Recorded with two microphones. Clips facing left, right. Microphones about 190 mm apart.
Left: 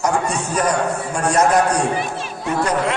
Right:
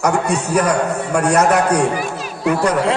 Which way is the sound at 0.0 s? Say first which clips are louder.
Right 3 dB; 65° right (ahead or behind).